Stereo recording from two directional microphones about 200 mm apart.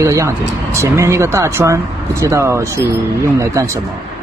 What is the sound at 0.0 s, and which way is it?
Speech, 15° right (ahead or behind).